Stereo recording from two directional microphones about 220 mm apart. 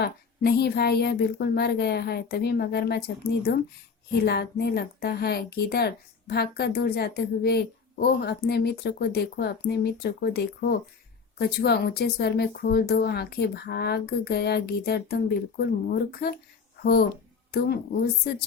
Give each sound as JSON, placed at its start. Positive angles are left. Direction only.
{"t": 0.0, "sound": "a woman's voice", "side_deg": 45}